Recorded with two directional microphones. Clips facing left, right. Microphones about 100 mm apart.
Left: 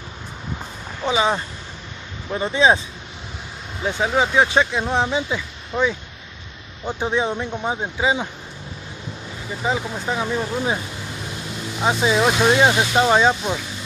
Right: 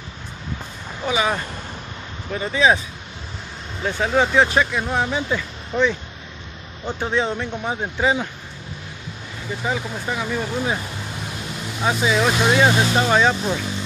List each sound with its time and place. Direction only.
1.0 s speech: 25° left (ahead or behind)
3.8 s speech: 15° left (ahead or behind)
9.6 s speech: 20° left (ahead or behind)
11.8 s speech: 20° left (ahead or behind)